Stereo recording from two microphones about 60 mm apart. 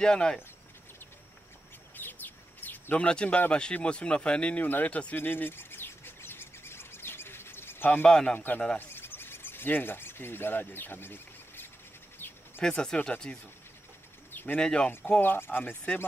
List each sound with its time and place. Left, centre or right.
0.0 s speech: centre
2.0 s bird: left
3.6 s speech: centre
5.1 s bird: left
8.0 s speech: centre
8.7 s a sound: left
12.6 s speech: centre
14.3 s bird: left
14.6 s speech: centre
15.1 s speech: left